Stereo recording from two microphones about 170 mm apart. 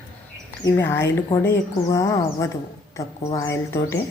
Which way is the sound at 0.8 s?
15° left (ahead or behind).